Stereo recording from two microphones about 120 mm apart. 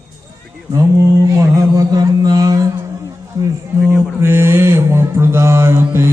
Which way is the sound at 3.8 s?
20° right (ahead or behind).